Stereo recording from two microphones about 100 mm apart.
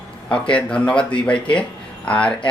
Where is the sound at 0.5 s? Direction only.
10° left (ahead or behind).